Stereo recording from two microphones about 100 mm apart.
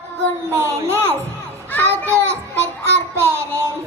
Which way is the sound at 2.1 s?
25° right (ahead or behind).